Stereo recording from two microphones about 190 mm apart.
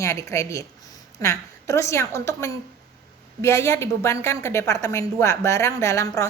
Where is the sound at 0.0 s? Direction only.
15° left (ahead or behind).